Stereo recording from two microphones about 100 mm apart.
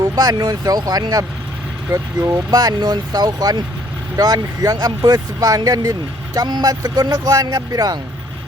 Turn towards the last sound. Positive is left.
turn(degrees=-40)  # may be behind; listen again after turning